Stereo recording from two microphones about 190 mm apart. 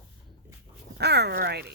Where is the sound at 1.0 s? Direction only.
60° right (ahead or behind).